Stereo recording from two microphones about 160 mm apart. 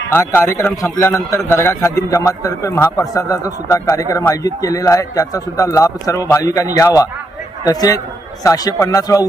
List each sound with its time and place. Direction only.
0.1 s a man's voice: 15° left (ahead or behind)